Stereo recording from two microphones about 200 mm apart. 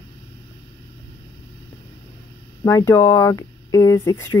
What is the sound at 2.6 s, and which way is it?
Speech, 15° left (ahead or behind).